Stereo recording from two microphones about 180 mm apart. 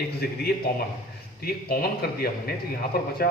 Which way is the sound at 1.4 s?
55° left (ahead or behind).